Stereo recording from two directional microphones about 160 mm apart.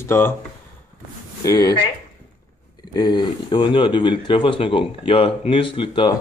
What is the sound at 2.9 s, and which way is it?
Speech, 25° left (ahead or behind).